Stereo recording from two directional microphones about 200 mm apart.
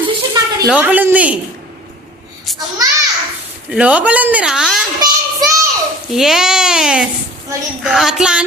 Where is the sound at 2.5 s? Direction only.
Centre (ahead or behind).